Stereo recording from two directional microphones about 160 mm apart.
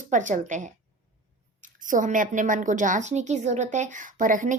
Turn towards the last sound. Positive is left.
turn(degrees=-55)  # may be behind; listen again after turning